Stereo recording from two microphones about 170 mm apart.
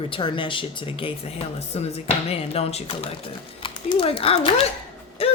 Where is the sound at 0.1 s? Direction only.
30° left (ahead or behind).